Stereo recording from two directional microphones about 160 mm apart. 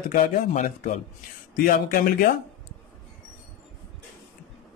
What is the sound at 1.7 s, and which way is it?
Speech, 65° left (ahead or behind).